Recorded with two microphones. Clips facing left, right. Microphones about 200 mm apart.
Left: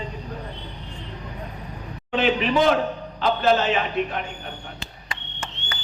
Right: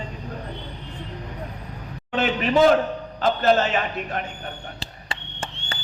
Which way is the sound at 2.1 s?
45° right (ahead or behind).